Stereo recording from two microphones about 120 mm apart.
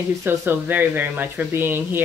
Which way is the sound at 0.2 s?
15° right (ahead or behind).